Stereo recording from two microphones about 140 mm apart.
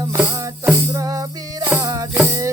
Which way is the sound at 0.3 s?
20° right (ahead or behind).